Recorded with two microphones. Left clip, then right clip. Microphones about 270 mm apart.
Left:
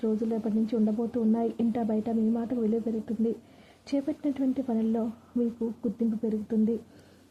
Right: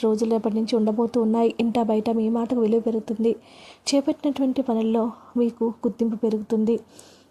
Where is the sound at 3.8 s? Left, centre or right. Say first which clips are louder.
Right 8 dB; centre.